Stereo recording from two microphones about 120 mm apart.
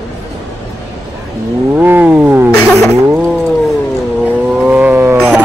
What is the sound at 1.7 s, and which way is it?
Wild animals, 15° right (ahead or behind).